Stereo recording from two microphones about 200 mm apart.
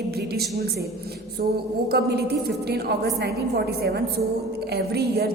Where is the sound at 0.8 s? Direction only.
50° right (ahead or behind).